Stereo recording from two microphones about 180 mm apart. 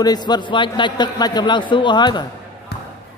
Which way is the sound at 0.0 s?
20° left (ahead or behind).